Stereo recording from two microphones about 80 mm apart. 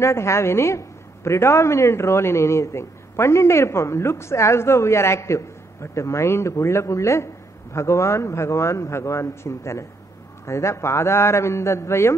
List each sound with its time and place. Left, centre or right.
0.0 s a woman's voice: left